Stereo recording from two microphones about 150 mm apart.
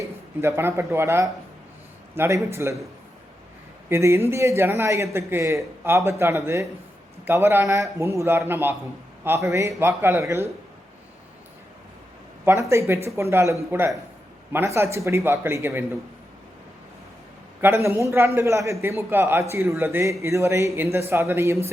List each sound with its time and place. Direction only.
0.0 s a sound: 15° right (ahead or behind)
0.9 s a man's voice: 15° right (ahead or behind)
3.8 s a man's voice: 20° right (ahead or behind)
12.5 s a man's voice: 20° right (ahead or behind)
17.6 s a man's voice: 20° right (ahead or behind)